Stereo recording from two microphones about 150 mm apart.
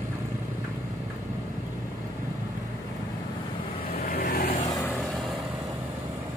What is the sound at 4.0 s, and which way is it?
Vehicle, 75° left (ahead or behind).